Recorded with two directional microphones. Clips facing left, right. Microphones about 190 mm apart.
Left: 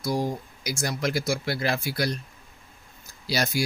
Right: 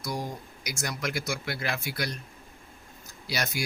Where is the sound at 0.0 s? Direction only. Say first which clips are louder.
Left 7 dB; 30° left (ahead or behind).